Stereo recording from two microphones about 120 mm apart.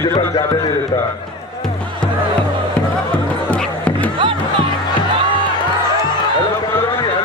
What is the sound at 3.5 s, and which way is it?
Music, 10° left (ahead or behind).